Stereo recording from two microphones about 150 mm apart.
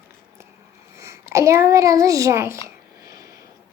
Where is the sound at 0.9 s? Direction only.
20° right (ahead or behind).